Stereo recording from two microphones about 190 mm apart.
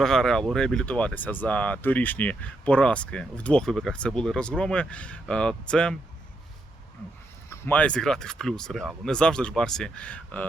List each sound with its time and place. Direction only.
0.0 s speech: centre (ahead or behind)
7.5 s speech: 10° left (ahead or behind)